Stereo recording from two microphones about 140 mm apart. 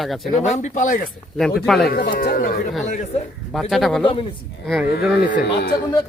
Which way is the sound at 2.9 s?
65° left (ahead or behind).